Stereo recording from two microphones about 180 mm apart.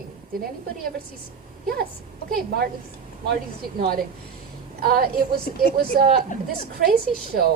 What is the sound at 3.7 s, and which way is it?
A woman's voice, 55° right (ahead or behind).